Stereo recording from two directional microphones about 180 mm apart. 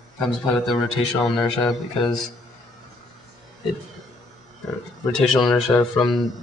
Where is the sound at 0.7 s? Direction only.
25° left (ahead or behind).